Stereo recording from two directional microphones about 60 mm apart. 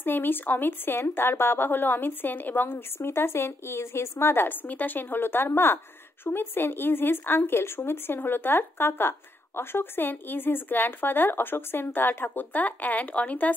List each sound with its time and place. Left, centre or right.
0.0 s a woman's voice: left